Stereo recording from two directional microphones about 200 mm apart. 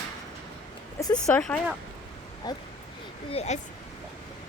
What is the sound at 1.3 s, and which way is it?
Speech, 5° left (ahead or behind).